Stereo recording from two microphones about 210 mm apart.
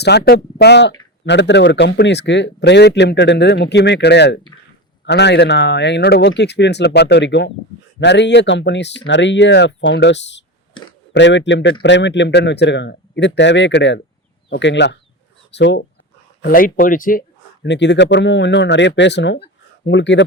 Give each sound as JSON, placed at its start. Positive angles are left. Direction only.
{"t": 0.0, "sound": "speech", "side_deg": 50}
{"t": 16.4, "sound": "speech", "side_deg": 45}